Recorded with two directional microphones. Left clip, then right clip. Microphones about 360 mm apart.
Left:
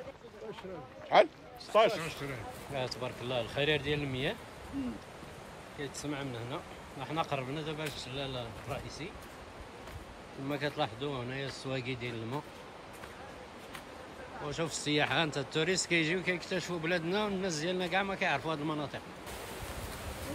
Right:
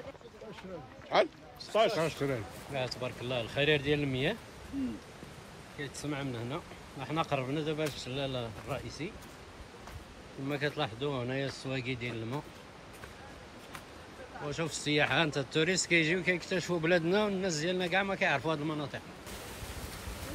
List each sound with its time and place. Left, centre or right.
1.1 s speech: left
2.0 s speech: centre
2.7 s speech: centre
5.8 s speech: centre
10.5 s speech: centre
14.5 s speech: centre